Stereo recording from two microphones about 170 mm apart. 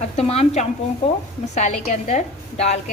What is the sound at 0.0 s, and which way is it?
A woman's voice, 40° left (ahead or behind).